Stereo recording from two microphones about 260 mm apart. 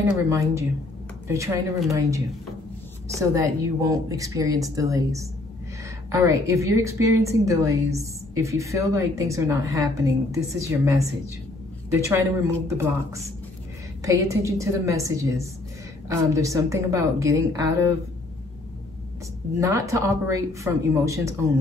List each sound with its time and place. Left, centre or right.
0.0 s a woman's voice: centre
11.9 s a woman's voice: centre
19.6 s a woman's voice: centre